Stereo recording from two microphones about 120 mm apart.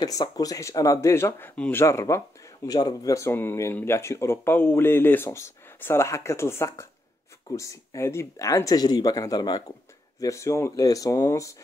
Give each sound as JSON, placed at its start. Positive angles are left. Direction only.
{"t": 0.0, "sound": "speech", "side_deg": 30}